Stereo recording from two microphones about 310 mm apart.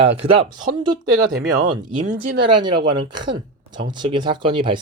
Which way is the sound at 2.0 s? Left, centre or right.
Right.